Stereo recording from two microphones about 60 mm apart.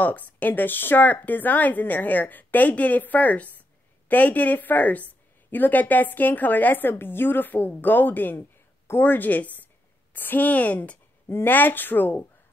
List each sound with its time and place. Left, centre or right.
0.0 s a woman's voice: left
11.2 s speech: left